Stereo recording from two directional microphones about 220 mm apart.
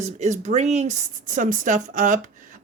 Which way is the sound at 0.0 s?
35° right (ahead or behind).